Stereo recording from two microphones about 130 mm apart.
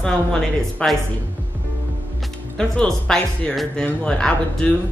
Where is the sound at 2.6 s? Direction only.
5° left (ahead or behind).